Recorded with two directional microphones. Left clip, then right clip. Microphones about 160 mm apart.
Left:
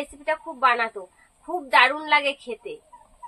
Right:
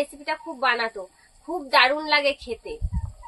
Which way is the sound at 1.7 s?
10° left (ahead or behind).